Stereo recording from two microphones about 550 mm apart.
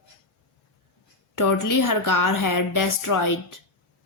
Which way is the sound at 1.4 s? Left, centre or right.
Left.